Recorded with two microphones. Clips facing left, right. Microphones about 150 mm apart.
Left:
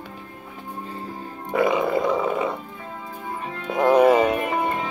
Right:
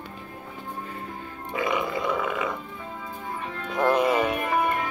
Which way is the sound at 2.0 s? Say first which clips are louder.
Left 5 dB; 35° left (ahead or behind).